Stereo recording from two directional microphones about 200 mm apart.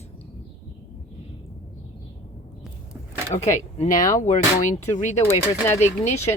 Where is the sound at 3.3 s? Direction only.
25° left (ahead or behind).